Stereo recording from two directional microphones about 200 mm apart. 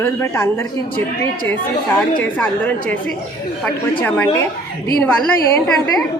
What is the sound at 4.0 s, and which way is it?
Speech, 10° left (ahead or behind).